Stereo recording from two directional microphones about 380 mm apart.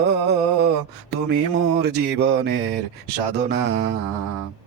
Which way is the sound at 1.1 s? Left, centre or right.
Right.